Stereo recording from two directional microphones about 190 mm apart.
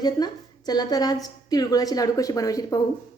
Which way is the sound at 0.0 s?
20° left (ahead or behind).